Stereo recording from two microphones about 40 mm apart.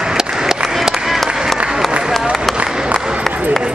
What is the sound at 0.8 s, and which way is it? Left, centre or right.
Applause, centre.